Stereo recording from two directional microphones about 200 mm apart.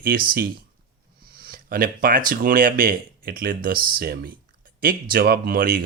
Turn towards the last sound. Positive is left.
turn(degrees=-45)  # may be behind; listen again after turning